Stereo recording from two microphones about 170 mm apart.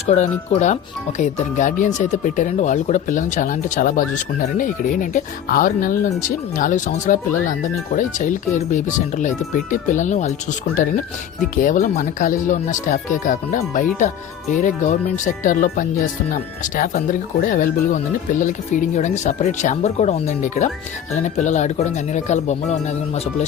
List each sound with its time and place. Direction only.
0.0 s speech: 40° left (ahead or behind)
11.5 s speech: 50° left (ahead or behind)